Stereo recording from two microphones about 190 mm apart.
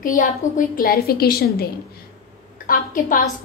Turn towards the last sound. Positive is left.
turn(degrees=45)  # may be behind; listen again after turning